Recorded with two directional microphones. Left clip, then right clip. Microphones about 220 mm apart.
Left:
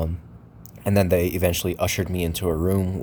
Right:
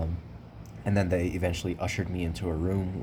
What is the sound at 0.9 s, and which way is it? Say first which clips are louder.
Speech: left 8 dB; 40° left (ahead or behind).